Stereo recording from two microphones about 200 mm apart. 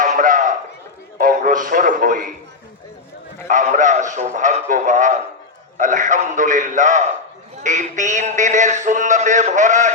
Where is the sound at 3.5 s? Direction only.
40° right (ahead or behind).